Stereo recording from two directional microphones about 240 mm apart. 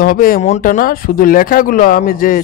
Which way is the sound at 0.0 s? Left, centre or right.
Left.